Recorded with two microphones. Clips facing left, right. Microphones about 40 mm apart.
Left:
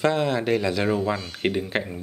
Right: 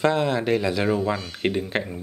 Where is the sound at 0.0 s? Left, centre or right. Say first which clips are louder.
Right 1 dB; centre.